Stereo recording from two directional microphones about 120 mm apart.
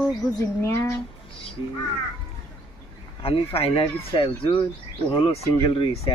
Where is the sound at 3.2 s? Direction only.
50° left (ahead or behind).